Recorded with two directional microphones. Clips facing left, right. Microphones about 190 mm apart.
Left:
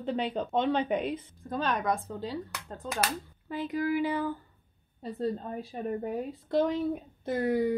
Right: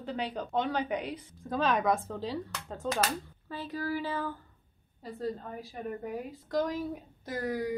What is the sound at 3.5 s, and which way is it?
Speech, 15° left (ahead or behind).